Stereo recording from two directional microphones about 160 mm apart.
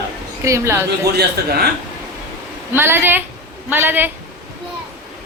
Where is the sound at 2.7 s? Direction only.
15° right (ahead or behind).